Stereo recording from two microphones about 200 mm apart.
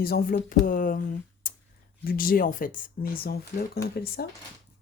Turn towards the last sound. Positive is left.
turn(degrees=50)  # may be behind; listen again after turning